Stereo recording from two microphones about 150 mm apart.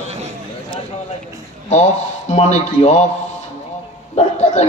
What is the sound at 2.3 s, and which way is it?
Speech, 50° left (ahead or behind).